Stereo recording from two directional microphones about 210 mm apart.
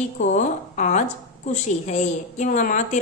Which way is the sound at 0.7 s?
35° left (ahead or behind).